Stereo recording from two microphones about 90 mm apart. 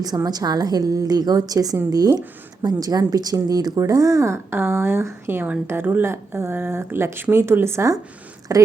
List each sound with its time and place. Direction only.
0.3 s a woman's voice: 45° right (ahead or behind)